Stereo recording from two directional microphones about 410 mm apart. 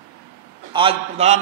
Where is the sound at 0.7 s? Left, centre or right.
Centre.